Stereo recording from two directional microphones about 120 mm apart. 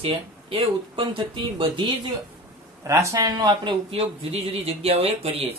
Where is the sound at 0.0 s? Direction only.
50° right (ahead or behind).